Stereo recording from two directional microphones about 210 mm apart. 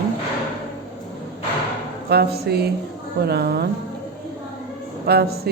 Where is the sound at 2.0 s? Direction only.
50° right (ahead or behind).